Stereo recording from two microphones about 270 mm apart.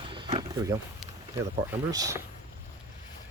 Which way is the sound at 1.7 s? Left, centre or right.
Centre.